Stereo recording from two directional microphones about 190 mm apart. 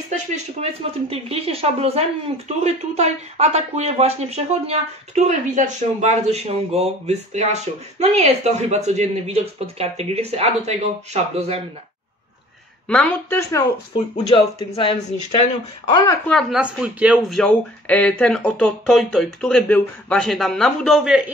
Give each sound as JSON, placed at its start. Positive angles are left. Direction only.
{"t": 0.1, "sound": "speech", "side_deg": -40}
{"t": 12.8, "sound": "speech", "side_deg": 5}
{"t": 14.1, "sound": "speech", "side_deg": 25}
{"t": 16.3, "sound": "speech", "side_deg": 0}